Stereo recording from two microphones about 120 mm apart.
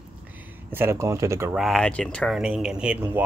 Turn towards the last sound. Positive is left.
turn(degrees=-10)  # may be behind; listen again after turning